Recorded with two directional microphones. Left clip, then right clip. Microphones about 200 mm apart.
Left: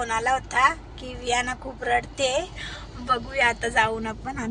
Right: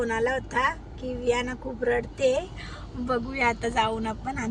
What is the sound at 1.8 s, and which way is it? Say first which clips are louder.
Speech: even; 5° left (ahead or behind).